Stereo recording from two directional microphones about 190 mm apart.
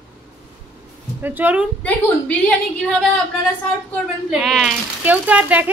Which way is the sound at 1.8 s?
5° left (ahead or behind).